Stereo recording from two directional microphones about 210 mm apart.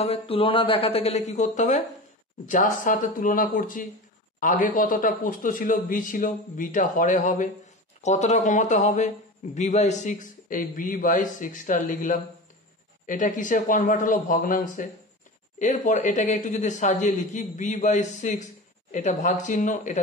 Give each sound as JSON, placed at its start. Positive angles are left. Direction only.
{"t": 0.0, "sound": "a man's voice", "side_deg": 25}